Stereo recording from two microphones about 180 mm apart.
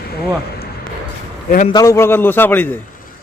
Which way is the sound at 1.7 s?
15° left (ahead or behind).